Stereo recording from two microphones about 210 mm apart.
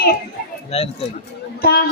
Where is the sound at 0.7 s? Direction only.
30° left (ahead or behind).